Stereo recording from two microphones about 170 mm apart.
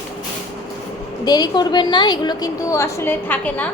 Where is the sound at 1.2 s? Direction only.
25° left (ahead or behind).